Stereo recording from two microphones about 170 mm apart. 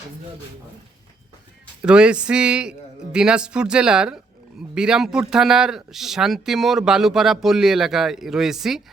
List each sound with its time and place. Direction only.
1.8 s speech: 5° right (ahead or behind)